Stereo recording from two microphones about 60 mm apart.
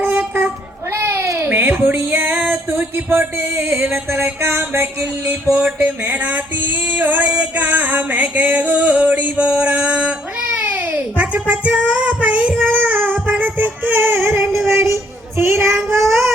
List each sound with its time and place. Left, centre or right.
0.0 s child singing: right
1.4 s a sound: right
1.8 s music: right
5.2 s music: right
10.6 s a sound: right
14.7 s child singing: right